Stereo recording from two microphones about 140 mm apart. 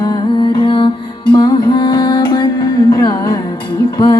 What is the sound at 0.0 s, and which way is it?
Music, 30° left (ahead or behind).